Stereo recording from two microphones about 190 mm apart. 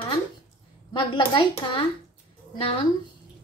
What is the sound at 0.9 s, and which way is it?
Speech, 25° left (ahead or behind).